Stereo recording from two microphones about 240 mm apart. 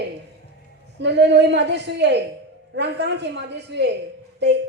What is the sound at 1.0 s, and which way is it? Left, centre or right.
A woman's voice, right.